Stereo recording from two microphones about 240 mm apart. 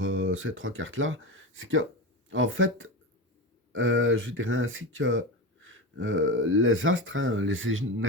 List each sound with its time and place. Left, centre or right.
0.0 s speech: right